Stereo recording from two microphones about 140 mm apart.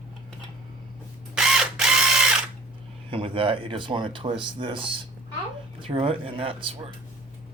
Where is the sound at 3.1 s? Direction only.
40° right (ahead or behind).